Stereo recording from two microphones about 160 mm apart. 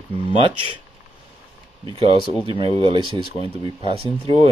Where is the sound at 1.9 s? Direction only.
35° right (ahead or behind).